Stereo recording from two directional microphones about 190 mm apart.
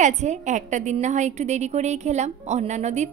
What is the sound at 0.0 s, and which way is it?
A woman's voice, 40° right (ahead or behind).